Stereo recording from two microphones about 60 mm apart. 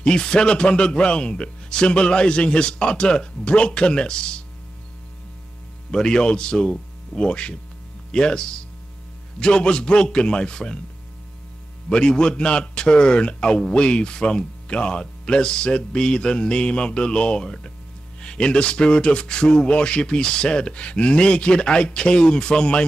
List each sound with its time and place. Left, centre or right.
0.0 s a man's voice: centre
5.9 s a man's voice: centre
11.9 s a man's voice: centre